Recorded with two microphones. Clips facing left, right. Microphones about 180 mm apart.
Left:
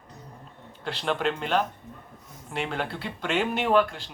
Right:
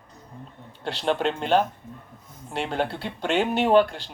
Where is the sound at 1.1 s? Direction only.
30° right (ahead or behind).